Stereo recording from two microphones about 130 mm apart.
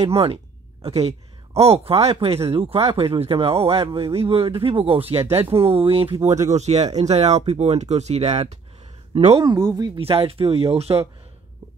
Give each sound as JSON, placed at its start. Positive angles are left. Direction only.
{"t": 0.0, "sound": "speech", "side_deg": -50}
{"t": 6.5, "sound": "speech", "side_deg": -60}
{"t": 9.4, "sound": "speech", "side_deg": -30}
{"t": 9.9, "sound": "speech", "side_deg": -45}